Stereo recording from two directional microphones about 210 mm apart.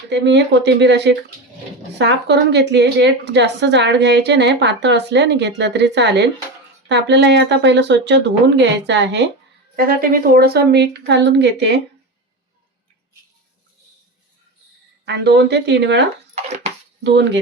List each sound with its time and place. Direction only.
0.1 s a woman's voice: 55° right (ahead or behind)
9.7 s a woman's voice: 45° right (ahead or behind)
15.0 s a woman's voice: 55° right (ahead or behind)